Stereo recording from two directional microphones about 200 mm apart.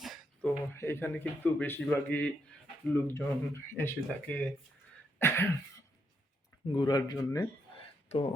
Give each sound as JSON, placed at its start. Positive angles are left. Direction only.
{"t": 0.0, "sound": "a sound", "side_deg": 0}
{"t": 0.7, "sound": "speech", "side_deg": 10}
{"t": 5.2, "sound": "throat clearing", "side_deg": 10}
{"t": 6.7, "sound": "speech", "side_deg": 20}